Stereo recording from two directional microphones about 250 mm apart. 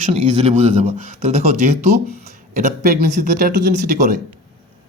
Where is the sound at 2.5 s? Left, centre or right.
Right.